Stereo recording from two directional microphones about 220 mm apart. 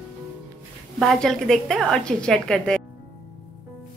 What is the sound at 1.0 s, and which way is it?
A woman's voice, centre (ahead or behind).